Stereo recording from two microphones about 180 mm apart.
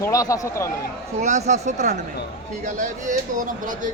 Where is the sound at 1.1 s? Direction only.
40° right (ahead or behind).